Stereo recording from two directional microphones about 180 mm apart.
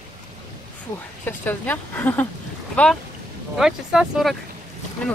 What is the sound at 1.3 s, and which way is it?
Speech, 10° left (ahead or behind).